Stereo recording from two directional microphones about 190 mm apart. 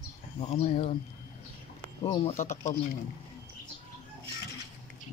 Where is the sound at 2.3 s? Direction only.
40° left (ahead or behind).